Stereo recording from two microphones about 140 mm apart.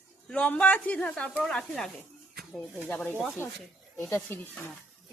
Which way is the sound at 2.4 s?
Centre (ahead or behind).